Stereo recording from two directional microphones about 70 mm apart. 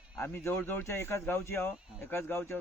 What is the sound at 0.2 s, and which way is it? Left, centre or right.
Speech, left.